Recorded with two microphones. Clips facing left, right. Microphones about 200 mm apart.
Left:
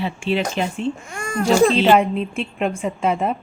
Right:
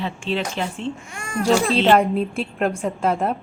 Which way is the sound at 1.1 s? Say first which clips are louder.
Left 3 dB; 45° left (ahead or behind).